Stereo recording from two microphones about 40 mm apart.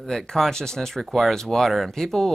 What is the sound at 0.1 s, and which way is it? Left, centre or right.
Speech, centre.